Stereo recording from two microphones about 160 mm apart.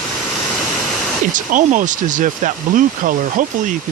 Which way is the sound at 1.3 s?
55° right (ahead or behind).